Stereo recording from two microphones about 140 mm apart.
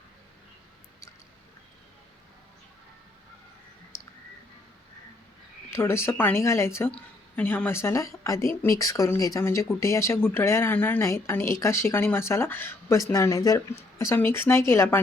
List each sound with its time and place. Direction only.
5.7 s speech: 20° left (ahead or behind)